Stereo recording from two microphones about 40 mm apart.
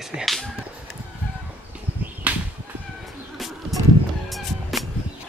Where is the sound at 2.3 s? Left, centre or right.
Right.